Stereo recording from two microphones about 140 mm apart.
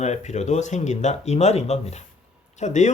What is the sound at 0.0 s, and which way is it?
Speech, 55° left (ahead or behind).